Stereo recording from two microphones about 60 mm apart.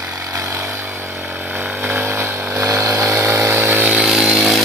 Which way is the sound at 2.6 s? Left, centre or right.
Right.